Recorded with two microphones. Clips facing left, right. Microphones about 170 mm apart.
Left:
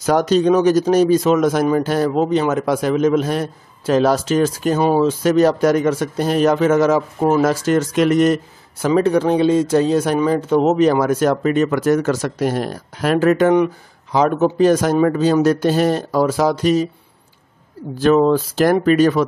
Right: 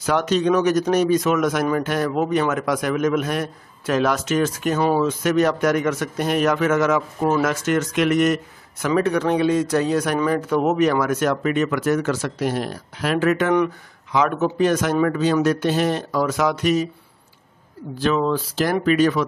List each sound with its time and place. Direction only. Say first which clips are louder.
0.0 s speech: left 5 dB; 40° left (ahead or behind)
17.9 s speech: left 7 dB; 45° left (ahead or behind)